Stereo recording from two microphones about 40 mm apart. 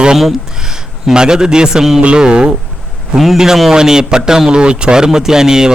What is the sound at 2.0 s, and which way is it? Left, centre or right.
Speech, right.